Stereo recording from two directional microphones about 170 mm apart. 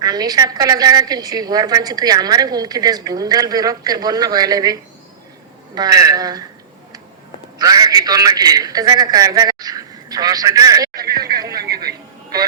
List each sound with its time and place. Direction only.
0.0 s a woman's voice: 25° right (ahead or behind)
7.6 s a man's voice: 20° right (ahead or behind)
10.9 s a sound: 65° right (ahead or behind)